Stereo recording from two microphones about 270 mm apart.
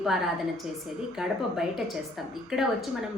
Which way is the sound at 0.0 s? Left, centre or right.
Centre.